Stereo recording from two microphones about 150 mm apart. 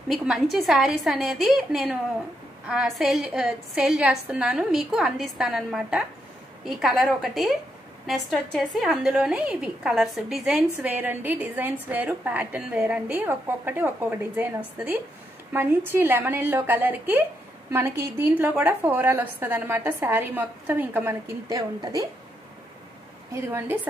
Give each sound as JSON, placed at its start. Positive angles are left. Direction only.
{"t": 0.1, "sound": "a woman's voice", "side_deg": -5}
{"t": 15.5, "sound": "a woman's voice", "side_deg": -15}
{"t": 23.3, "sound": "a woman's voice", "side_deg": -20}